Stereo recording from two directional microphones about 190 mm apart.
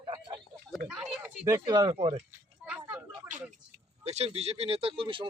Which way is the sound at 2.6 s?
10° right (ahead or behind).